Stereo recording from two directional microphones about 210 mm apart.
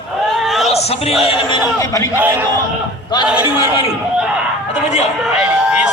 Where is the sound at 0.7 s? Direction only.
30° left (ahead or behind).